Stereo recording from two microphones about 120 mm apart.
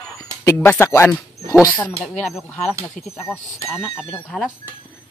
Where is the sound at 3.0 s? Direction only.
90° left.